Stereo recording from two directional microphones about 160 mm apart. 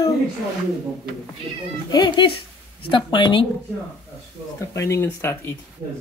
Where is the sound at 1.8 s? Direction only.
30° left (ahead or behind).